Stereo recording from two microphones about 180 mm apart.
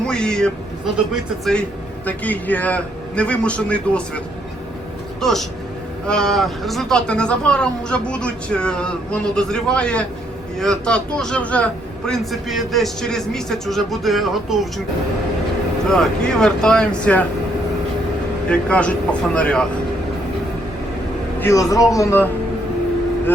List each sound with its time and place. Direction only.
0.0 s a man's voice: 5° left (ahead or behind)
5.2 s a man's voice: centre (ahead or behind)
15.9 s a man's voice: 5° left (ahead or behind)
18.4 s a man's voice: 5° left (ahead or behind)
21.4 s a man's voice: 20° left (ahead or behind)